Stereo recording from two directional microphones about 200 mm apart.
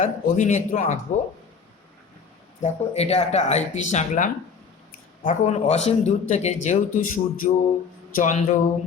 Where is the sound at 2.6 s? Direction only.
35° left (ahead or behind).